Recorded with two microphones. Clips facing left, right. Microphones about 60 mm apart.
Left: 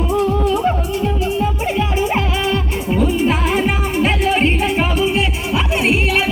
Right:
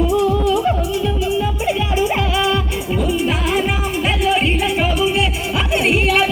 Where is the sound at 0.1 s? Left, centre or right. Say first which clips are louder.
Right 1 dB; left.